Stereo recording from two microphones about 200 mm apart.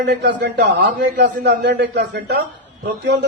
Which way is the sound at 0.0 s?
55° right (ahead or behind).